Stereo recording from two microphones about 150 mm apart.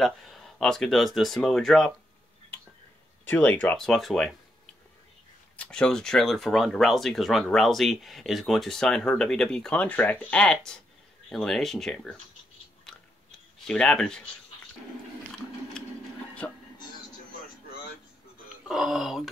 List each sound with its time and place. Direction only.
0.0 s speech: centre (ahead or behind)
3.3 s speech: 10° left (ahead or behind)
5.6 s speech: 5° left (ahead or behind)
12.9 s chewing: 5° left (ahead or behind)
13.7 s speech: 5° left (ahead or behind)
15.8 s a sound: 5° left (ahead or behind)
16.4 s music: 10° left (ahead or behind)
18.7 s speech: 5° right (ahead or behind)